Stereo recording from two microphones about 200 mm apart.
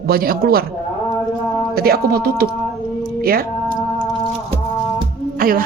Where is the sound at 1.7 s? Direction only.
50° right (ahead or behind).